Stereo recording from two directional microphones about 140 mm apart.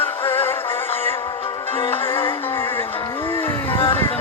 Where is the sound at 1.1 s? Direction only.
35° left (ahead or behind).